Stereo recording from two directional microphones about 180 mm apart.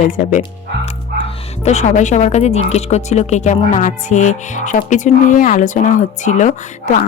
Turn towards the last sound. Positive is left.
turn(degrees=40)  # may be behind; listen again after turning